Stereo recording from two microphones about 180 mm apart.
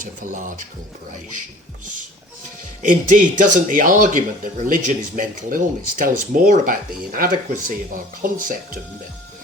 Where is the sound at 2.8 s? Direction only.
45° right (ahead or behind).